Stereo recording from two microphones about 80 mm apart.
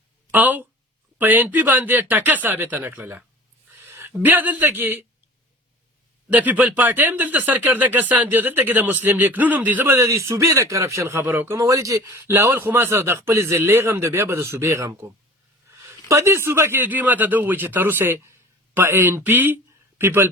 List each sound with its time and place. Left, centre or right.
0.3 s speech: right
3.8 s a sound: right
4.2 s speech: right
6.3 s speech: centre
11.5 s a man's voice: right
15.9 s a man's voice: right